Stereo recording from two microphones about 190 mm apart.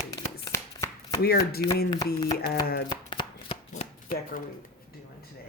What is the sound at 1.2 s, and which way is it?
Speech, 55° left (ahead or behind).